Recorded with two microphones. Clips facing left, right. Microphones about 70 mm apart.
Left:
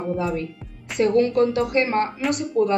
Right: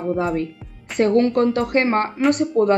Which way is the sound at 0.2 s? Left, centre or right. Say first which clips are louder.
Right 3 dB; right.